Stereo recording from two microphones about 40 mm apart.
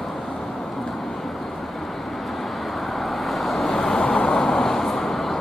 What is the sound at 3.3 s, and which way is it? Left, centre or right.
Vehicle, centre.